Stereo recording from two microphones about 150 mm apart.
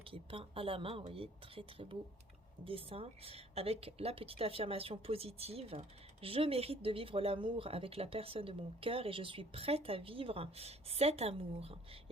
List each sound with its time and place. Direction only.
0.1 s speech: 35° right (ahead or behind)